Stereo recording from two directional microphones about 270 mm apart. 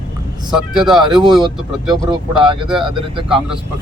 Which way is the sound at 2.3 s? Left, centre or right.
Centre.